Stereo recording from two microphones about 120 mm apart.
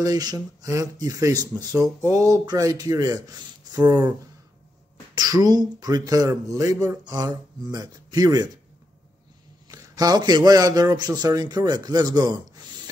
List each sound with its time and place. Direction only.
0.0 s speech: 30° right (ahead or behind)
5.1 s speech: 35° right (ahead or behind)
9.7 s a man's voice: 30° right (ahead or behind)